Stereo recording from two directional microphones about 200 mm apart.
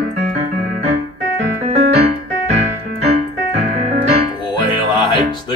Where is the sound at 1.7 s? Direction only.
35° right (ahead or behind).